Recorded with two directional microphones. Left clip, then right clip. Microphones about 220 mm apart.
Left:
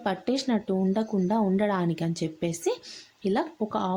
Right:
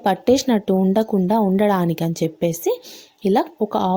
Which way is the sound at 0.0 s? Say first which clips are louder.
Right 11 dB; 30° right (ahead or behind).